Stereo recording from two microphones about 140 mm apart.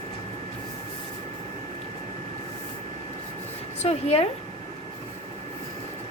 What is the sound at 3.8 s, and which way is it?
Speech, 50° left (ahead or behind).